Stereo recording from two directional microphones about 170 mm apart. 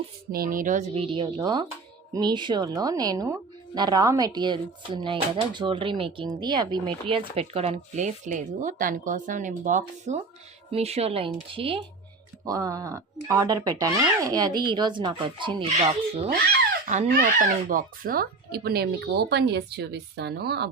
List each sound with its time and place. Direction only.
0.3 s speech: 60° right (ahead or behind)
1.0 s speech: 30° right (ahead or behind)
12.5 s speech: 20° right (ahead or behind)
17.1 s speech: 55° right (ahead or behind); by 20.7 s 75° right (ahead or behind)